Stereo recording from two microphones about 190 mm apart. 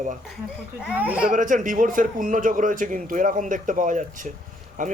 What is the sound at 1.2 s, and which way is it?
Speech, 45° right (ahead or behind).